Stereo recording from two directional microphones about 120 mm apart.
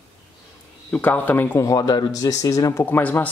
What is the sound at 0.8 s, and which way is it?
Speech, 15° left (ahead or behind).